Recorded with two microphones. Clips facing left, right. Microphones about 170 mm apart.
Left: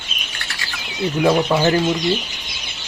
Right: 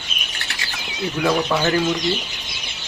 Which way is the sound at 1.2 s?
25° left (ahead or behind).